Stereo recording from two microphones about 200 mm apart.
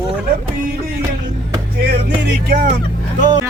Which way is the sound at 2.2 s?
55° right (ahead or behind).